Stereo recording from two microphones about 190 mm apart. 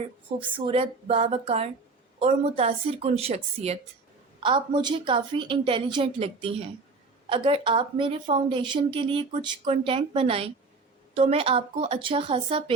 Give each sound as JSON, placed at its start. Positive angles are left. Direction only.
{"t": 0.3, "sound": "a woman's voice", "side_deg": -25}